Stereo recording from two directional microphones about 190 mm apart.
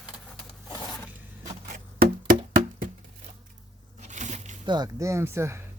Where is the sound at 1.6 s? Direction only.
45° right (ahead or behind).